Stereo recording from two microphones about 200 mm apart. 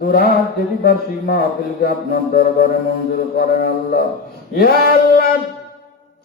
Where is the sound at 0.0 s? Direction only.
50° left (ahead or behind).